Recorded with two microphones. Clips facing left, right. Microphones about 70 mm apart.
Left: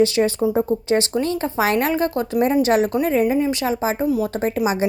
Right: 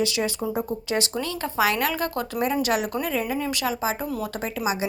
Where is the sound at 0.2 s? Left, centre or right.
Left.